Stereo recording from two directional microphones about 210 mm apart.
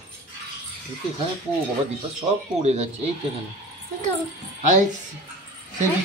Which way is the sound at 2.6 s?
30° right (ahead or behind).